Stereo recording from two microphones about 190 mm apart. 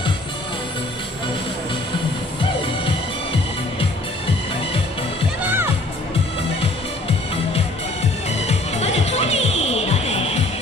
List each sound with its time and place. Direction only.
6.6 s music: 30° left (ahead or behind)